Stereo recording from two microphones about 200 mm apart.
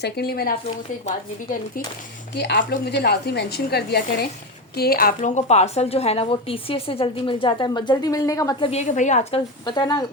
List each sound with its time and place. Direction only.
0.0 s a woman's voice: 50° left (ahead or behind)
2.3 s a woman's voice: 60° left (ahead or behind); by 8.7 s 15° left (ahead or behind)
8.7 s a woman's voice: 35° left (ahead or behind)
9.6 s a woman's voice: 20° left (ahead or behind)